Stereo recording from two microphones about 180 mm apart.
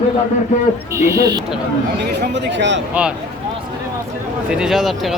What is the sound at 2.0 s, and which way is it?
Speech, 65° right (ahead or behind).